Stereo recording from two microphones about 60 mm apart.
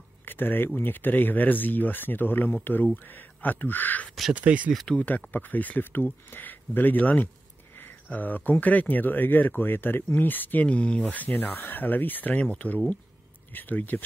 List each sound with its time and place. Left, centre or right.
0.2 s a sound: left
0.7 s speech: left
4.3 s speech: right
4.9 s speech: left